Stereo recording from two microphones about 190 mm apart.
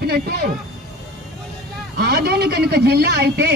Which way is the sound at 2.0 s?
55° right (ahead or behind).